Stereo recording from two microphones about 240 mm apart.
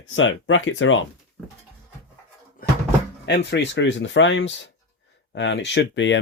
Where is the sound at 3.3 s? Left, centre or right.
Left.